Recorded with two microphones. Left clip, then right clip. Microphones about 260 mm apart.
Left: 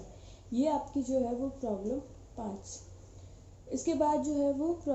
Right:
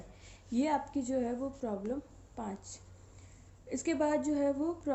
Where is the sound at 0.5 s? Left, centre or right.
Right.